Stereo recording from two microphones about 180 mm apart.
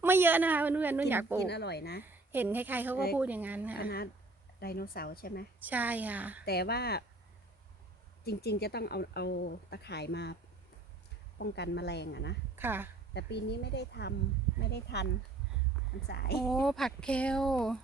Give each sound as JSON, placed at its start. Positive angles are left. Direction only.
{"t": 0.0, "sound": "a woman's voice", "side_deg": -10}
{"t": 1.4, "sound": "speech", "side_deg": 70}
{"t": 2.0, "sound": "a woman's voice", "side_deg": -10}
{"t": 3.8, "sound": "speech", "side_deg": 60}
{"t": 5.6, "sound": "a woman's voice", "side_deg": -10}
{"t": 6.4, "sound": "speech", "side_deg": 60}
{"t": 8.2, "sound": "speech", "side_deg": 60}
{"t": 11.3, "sound": "speech", "side_deg": 70}
{"t": 12.5, "sound": "a woman's voice", "side_deg": -10}
{"t": 13.1, "sound": "speech", "side_deg": 70}
{"t": 16.0, "sound": "speech", "side_deg": 60}
{"t": 16.4, "sound": "speech", "side_deg": 0}